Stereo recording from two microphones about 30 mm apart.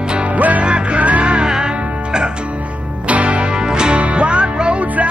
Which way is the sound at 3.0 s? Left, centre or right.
Right.